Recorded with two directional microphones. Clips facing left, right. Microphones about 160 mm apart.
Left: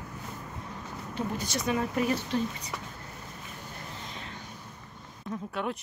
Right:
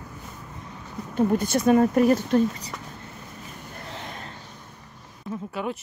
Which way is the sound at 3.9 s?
65° right (ahead or behind).